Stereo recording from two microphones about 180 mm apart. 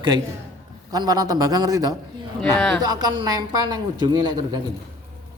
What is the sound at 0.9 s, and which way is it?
Speech, 20° right (ahead or behind).